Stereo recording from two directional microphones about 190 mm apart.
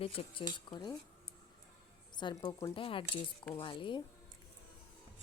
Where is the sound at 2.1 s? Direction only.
25° left (ahead or behind).